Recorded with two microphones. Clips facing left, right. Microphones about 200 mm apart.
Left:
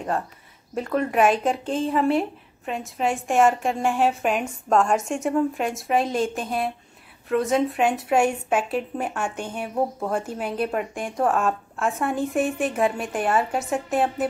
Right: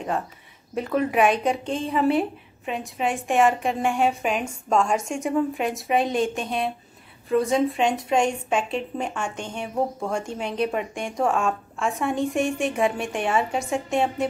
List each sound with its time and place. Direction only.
0.7 s a woman's voice: centre (ahead or behind)